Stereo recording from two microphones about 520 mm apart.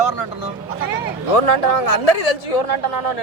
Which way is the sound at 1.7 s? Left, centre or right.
Left.